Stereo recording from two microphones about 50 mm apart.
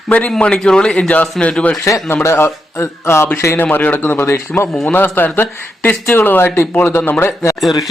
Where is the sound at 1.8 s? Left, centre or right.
Left.